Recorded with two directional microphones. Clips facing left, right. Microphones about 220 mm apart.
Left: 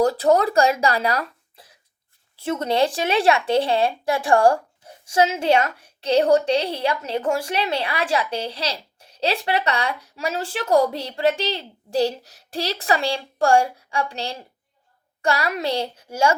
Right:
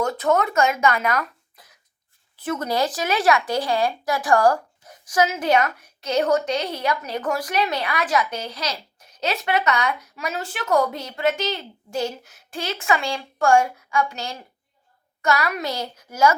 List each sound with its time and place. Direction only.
0.0 s a child's voice: 35° left (ahead or behind)